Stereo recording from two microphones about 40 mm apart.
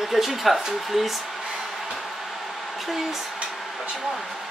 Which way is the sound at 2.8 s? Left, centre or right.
Centre.